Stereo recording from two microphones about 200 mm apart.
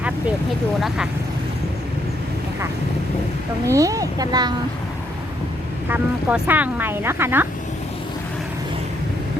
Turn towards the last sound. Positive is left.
turn(degrees=-10)  # may be behind; listen again after turning